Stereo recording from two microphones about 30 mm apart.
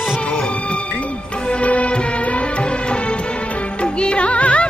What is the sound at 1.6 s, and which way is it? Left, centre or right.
Music, left.